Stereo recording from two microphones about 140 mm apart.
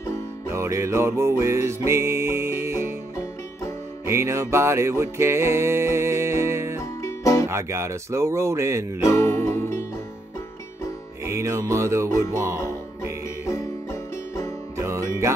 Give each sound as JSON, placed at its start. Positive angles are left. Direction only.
{"t": 0.5, "sound": "music", "side_deg": -20}
{"t": 4.0, "sound": "music", "side_deg": -20}
{"t": 6.8, "sound": "music", "side_deg": 20}
{"t": 7.4, "sound": "music", "side_deg": -20}
{"t": 9.0, "sound": "music", "side_deg": 20}
{"t": 11.2, "sound": "music", "side_deg": -20}
{"t": 14.8, "sound": "music", "side_deg": -20}